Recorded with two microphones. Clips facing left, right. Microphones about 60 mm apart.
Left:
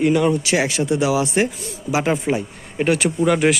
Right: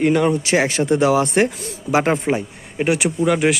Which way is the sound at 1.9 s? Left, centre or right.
Right.